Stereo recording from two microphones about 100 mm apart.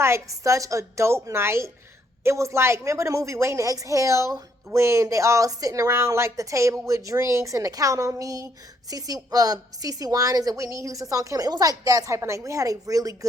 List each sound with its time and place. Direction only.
0.0 s a woman's voice: 30° right (ahead or behind)